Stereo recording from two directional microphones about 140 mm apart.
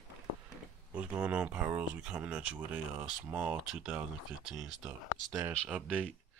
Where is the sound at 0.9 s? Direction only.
10° right (ahead or behind).